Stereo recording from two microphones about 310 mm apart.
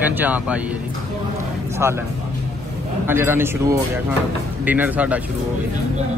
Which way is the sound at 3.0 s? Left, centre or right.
Centre.